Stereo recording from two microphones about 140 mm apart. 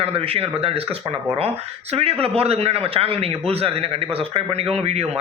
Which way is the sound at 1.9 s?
45° right (ahead or behind).